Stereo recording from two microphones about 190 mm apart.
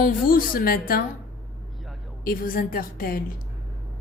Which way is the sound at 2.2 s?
50° left (ahead or behind).